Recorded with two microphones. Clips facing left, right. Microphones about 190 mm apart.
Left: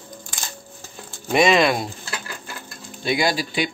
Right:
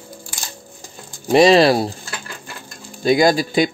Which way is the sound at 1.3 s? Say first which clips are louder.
Right 6 dB; 35° right (ahead or behind).